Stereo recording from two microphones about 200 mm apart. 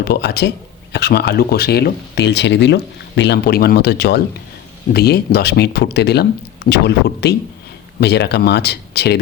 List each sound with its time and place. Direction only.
0.0 s speech: 55° left (ahead or behind)